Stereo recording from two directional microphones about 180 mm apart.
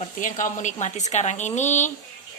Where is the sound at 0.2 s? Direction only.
45° left (ahead or behind).